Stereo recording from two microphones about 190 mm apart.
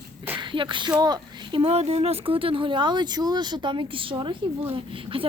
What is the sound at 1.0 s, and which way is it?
Speech, 25° right (ahead or behind).